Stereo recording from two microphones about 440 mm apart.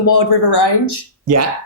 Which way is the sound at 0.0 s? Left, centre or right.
Left.